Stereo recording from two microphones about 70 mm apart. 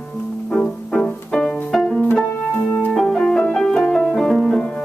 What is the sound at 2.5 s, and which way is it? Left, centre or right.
Music, left.